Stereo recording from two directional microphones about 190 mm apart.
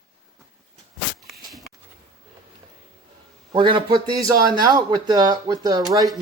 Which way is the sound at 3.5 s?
25° right (ahead or behind).